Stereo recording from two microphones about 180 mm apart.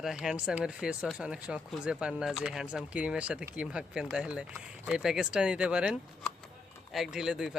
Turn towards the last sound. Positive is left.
turn(degrees=-5)  # may be behind; listen again after turning